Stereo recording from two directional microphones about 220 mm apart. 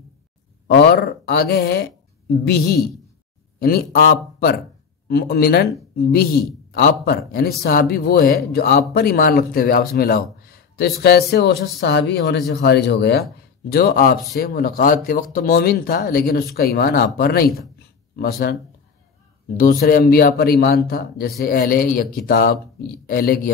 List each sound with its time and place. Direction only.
0.7 s speech: 50° left (ahead or behind)
3.5 s speech: 45° left (ahead or behind)